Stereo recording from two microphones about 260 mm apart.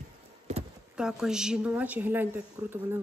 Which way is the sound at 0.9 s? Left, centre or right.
Centre.